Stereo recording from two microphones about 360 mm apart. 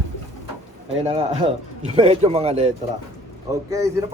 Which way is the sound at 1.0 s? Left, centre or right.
Centre.